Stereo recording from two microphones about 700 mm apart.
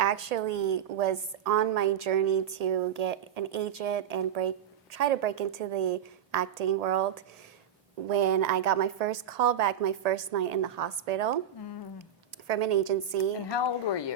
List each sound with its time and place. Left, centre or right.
0.0 s a woman's voice: right
12.5 s a woman's voice: right
13.5 s speech: left